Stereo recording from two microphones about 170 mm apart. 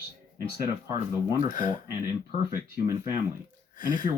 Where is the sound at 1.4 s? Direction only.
50° left (ahead or behind).